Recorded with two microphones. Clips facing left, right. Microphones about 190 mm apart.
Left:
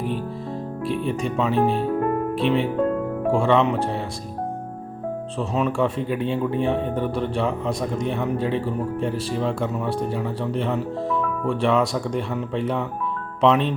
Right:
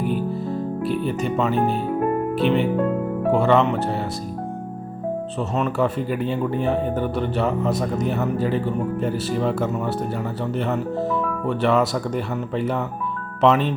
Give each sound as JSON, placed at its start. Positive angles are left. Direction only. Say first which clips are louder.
{"t": 0.0, "sound": "music", "louder": "right 4 dB", "side_deg": 0}
{"t": 2.3, "sound": "speech", "louder": "right 2 dB", "side_deg": 0}
{"t": 5.4, "sound": "speech", "louder": "even", "side_deg": 0}